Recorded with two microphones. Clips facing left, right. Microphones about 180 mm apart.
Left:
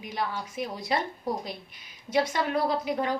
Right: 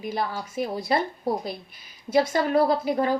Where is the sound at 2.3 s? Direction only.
40° right (ahead or behind).